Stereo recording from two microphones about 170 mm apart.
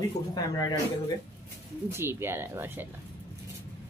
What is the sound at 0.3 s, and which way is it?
Speech, 25° left (ahead or behind).